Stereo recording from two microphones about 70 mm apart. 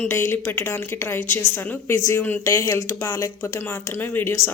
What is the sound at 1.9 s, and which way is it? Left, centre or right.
A woman's voice, left.